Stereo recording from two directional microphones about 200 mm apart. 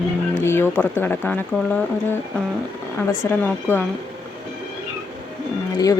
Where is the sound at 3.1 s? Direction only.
10° left (ahead or behind).